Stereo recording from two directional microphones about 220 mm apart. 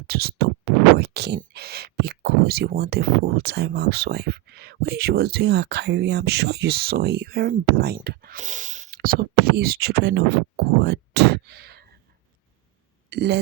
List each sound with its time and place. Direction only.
0.1 s speech: 45° right (ahead or behind)
13.1 s speech: 50° right (ahead or behind)